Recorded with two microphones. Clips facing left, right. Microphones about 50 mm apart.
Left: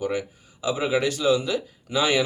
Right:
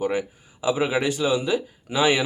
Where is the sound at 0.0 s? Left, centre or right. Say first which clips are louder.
Right 2 dB; right.